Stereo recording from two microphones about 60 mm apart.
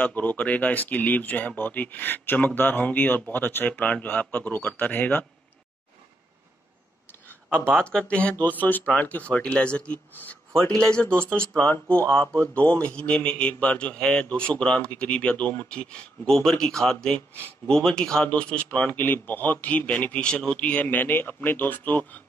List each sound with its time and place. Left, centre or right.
0.0 s a man's voice: left
7.6 s a man's voice: centre
18.9 s a man's voice: left